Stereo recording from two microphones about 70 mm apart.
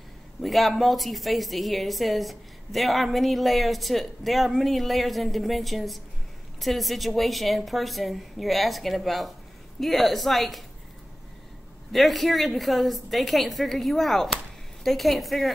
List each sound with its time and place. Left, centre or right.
0.4 s speech: centre
11.9 s speech: centre